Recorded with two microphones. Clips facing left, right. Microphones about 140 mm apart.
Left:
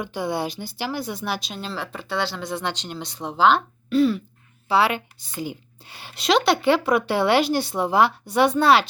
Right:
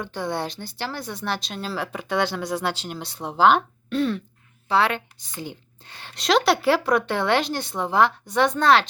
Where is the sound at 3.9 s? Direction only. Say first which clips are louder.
Left 5 dB; 5° left (ahead or behind).